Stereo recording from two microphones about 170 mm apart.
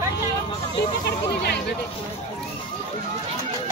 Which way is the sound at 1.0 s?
75° left (ahead or behind).